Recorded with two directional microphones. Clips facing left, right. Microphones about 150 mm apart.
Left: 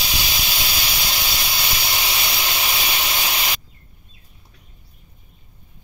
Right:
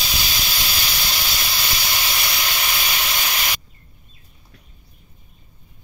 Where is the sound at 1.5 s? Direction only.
10° left (ahead or behind).